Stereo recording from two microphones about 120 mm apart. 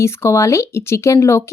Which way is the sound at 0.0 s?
20° left (ahead or behind).